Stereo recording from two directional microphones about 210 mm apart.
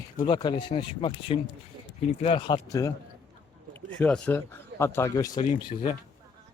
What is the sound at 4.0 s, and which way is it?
Speech, 10° left (ahead or behind).